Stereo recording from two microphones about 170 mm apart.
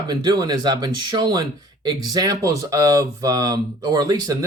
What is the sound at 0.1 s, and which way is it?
Speech, 25° right (ahead or behind).